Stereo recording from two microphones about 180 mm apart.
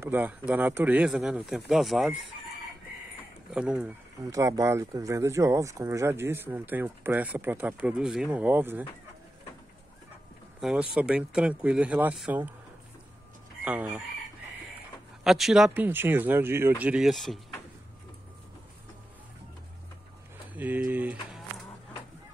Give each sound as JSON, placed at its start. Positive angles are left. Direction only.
{"t": 0.0, "sound": "speech", "side_deg": -10}
{"t": 3.5, "sound": "speech", "side_deg": -5}
{"t": 4.3, "sound": "speech", "side_deg": -15}
{"t": 10.6, "sound": "speech", "side_deg": -5}
{"t": 13.7, "sound": "speech", "side_deg": -10}
{"t": 15.2, "sound": "speech", "side_deg": 0}
{"t": 20.5, "sound": "speech", "side_deg": -10}